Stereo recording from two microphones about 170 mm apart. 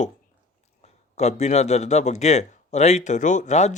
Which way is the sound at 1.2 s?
40° left (ahead or behind).